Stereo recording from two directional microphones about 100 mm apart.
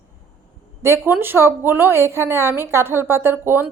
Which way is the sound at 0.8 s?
25° right (ahead or behind).